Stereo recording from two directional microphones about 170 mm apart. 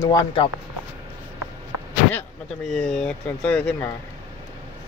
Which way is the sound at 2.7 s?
5° left (ahead or behind).